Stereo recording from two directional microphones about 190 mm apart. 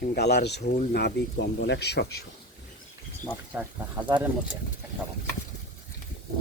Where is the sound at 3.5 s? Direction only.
10° right (ahead or behind).